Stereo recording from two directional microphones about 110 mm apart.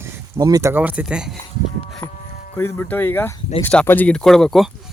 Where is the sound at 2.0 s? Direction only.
20° left (ahead or behind).